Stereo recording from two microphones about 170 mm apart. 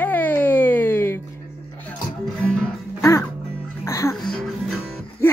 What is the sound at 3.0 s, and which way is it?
Music, 15° left (ahead or behind).